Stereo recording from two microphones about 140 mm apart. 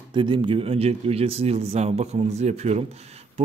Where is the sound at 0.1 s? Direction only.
35° right (ahead or behind).